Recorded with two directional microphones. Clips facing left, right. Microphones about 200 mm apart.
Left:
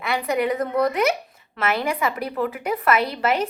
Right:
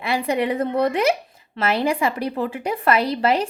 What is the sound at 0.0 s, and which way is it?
A woman's voice, 30° right (ahead or behind).